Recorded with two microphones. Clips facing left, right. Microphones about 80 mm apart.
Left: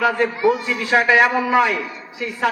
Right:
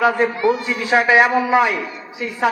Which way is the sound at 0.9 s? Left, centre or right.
Centre.